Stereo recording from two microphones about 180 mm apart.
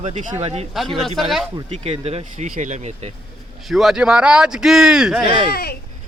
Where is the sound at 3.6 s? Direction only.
Centre (ahead or behind).